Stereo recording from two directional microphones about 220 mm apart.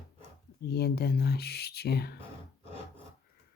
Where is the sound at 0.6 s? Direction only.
45° left (ahead or behind).